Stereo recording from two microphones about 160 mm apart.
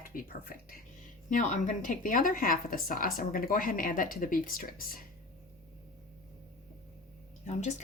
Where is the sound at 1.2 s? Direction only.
55° left (ahead or behind).